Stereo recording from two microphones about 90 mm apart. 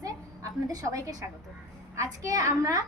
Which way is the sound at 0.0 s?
40° right (ahead or behind).